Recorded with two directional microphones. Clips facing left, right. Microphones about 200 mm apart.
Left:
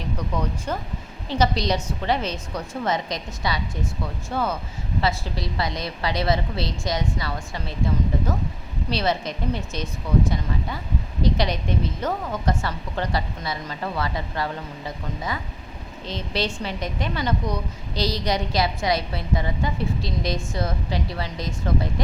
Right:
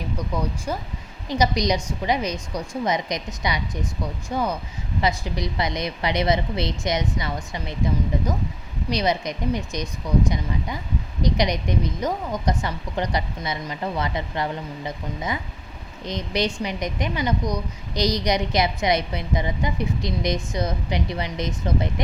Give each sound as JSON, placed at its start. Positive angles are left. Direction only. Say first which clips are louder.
{"t": 0.2, "sound": "a woman's voice", "louder": "right 1 dB", "side_deg": -10}
{"t": 8.9, "sound": "a woman's voice", "louder": "right 1 dB", "side_deg": -15}